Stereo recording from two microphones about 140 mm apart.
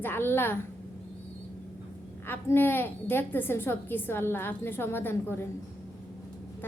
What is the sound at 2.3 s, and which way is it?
A woman's voice, 15° left (ahead or behind).